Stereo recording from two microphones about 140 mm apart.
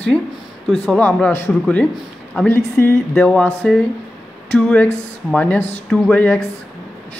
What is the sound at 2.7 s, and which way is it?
A woman's voice, 15° left (ahead or behind).